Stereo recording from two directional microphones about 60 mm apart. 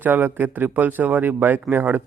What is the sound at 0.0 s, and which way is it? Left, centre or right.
A man's voice, right.